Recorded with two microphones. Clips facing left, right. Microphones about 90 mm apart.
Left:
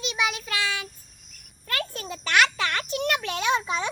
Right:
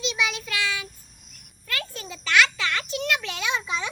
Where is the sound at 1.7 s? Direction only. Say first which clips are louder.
Left 2 dB; 45° left (ahead or behind).